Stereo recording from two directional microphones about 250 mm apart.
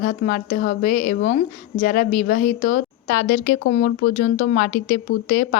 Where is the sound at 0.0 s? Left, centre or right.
Left.